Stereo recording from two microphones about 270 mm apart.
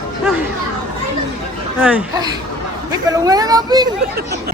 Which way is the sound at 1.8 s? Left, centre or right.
Centre.